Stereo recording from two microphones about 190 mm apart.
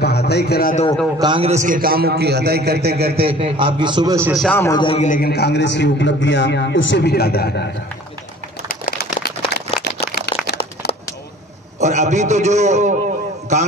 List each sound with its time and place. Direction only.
0.0 s a sound: 60° left (ahead or behind)
1.2 s a man's voice: 30° right (ahead or behind); by 3.2 s 55° right (ahead or behind)
3.2 s a man's voice: 30° right (ahead or behind)
4.3 s a man's voice: centre (ahead or behind)
4.6 s a man's voice: 15° left (ahead or behind)
4.8 s a man's voice: 35° left (ahead or behind); by 7.6 s 55° left (ahead or behind)
8.6 s a sound: 45° left (ahead or behind)
9.8 s a sound: 60° left (ahead or behind)
11.8 s a man's voice: 40° right (ahead or behind)